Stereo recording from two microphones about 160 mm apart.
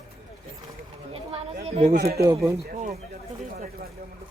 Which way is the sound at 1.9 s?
75° right (ahead or behind).